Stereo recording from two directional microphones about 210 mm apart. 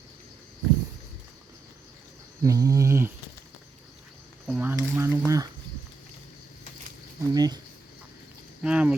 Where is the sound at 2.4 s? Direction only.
15° right (ahead or behind).